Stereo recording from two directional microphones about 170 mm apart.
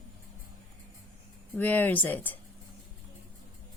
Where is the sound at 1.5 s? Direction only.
10° left (ahead or behind).